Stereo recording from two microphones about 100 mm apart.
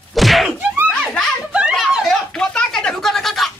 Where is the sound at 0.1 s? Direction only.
Centre (ahead or behind).